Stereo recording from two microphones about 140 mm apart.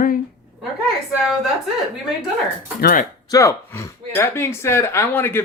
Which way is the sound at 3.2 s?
25° left (ahead or behind).